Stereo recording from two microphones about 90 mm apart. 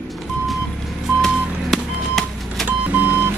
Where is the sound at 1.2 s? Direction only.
Centre (ahead or behind).